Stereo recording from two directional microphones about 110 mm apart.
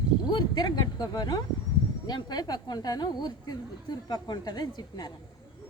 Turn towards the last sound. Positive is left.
turn(degrees=40)  # may be behind; listen again after turning